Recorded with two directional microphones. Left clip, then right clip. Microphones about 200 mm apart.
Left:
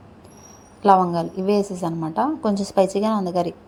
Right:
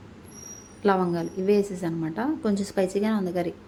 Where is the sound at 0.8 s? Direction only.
15° left (ahead or behind).